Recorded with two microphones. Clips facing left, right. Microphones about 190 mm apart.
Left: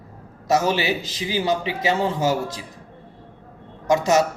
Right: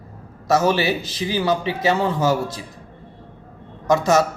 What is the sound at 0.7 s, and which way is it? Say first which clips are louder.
A man's voice: right 3 dB; 20° left (ahead or behind).